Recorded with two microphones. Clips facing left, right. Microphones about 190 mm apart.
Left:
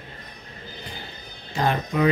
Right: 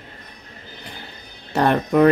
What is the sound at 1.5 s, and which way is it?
Speech, 65° right (ahead or behind).